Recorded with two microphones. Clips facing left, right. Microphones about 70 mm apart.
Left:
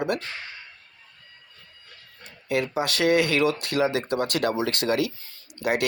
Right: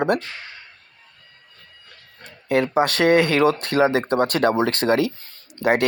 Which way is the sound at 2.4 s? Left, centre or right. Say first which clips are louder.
Right 7 dB; right.